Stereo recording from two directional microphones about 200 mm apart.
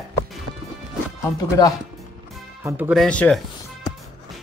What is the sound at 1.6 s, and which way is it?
Speech, 20° left (ahead or behind).